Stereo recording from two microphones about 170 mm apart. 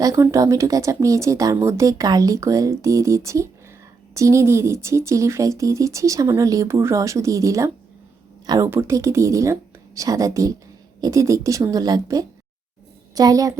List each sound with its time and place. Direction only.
0.0 s speech: 20° right (ahead or behind)